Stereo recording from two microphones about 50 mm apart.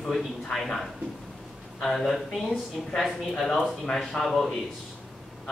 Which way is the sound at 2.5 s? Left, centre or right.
Centre.